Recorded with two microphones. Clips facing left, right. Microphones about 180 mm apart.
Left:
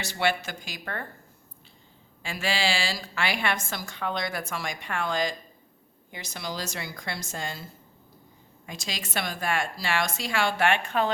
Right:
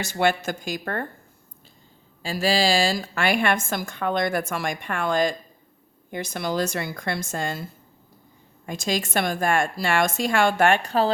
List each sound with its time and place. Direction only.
0.0 s a woman's voice: 45° right (ahead or behind)
2.2 s a woman's voice: 35° right (ahead or behind); by 7.6 s 50° right (ahead or behind)
8.6 s a woman's voice: 50° right (ahead or behind)